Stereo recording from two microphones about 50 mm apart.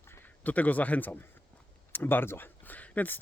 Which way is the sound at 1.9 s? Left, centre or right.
Left.